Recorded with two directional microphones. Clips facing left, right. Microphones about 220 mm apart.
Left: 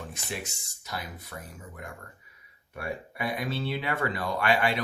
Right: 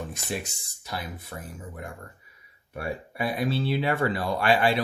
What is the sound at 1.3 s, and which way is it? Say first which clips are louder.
Speech: right 2 dB; 30° right (ahead or behind).